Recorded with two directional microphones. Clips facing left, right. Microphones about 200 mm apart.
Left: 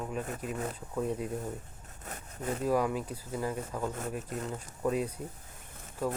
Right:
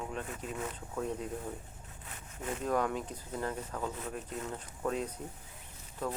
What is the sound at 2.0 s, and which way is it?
Sawing, 40° left (ahead or behind).